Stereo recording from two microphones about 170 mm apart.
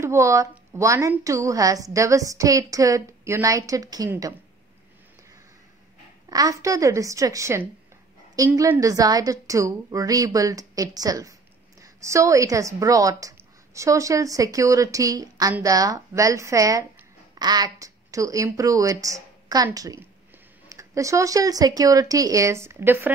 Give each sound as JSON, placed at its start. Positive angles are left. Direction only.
{"t": 0.0, "sound": "a woman's voice", "side_deg": -15}
{"t": 6.2, "sound": "a woman's voice", "side_deg": -20}